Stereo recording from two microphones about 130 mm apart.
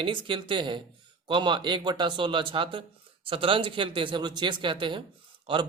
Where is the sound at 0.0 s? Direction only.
40° right (ahead or behind).